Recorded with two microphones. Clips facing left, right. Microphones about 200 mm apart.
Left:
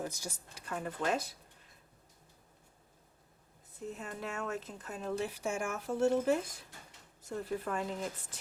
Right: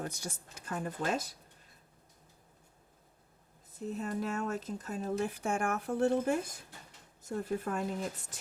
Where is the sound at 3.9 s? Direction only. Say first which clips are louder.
Right 6 dB; 40° right (ahead or behind).